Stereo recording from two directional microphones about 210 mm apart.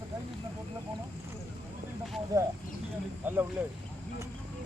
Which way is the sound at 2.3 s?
15° right (ahead or behind).